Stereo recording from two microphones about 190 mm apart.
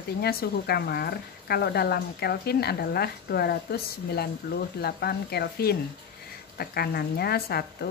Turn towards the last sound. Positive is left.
turn(degrees=55)  # may be behind; listen again after turning